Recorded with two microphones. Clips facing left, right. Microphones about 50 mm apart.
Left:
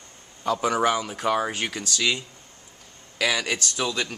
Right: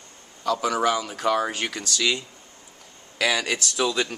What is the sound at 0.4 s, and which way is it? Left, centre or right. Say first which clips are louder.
Speech: even; left.